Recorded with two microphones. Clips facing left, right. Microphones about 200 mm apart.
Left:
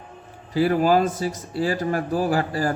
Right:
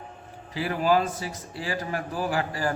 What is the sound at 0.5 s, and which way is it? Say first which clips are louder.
A man's voice: left 5 dB; 40° left (ahead or behind).